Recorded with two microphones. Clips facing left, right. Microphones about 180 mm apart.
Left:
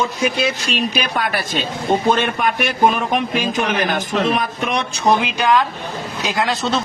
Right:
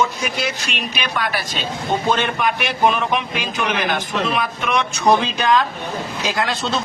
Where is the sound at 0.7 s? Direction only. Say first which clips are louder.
Left 5 dB; 45° left (ahead or behind).